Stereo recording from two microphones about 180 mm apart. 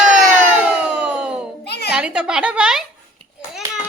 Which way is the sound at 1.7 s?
65° left (ahead or behind).